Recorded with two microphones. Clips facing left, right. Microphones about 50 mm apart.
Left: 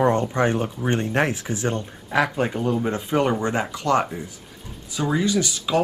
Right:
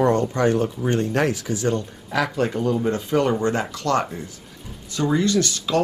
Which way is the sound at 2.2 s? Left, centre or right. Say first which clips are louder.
Right 1 dB; centre.